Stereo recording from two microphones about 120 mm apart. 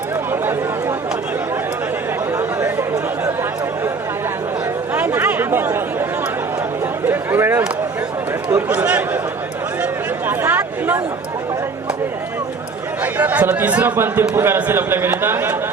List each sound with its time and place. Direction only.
2.6 s chatter: 25° right (ahead or behind)
4.9 s chatter: 15° right (ahead or behind)
7.1 s a sound: 20° right (ahead or behind)
13.1 s chatter: 15° right (ahead or behind)
13.5 s a man's voice: 15° right (ahead or behind)